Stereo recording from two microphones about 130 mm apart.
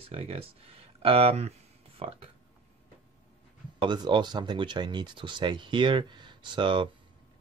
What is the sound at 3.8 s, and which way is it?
Speech, 35° right (ahead or behind).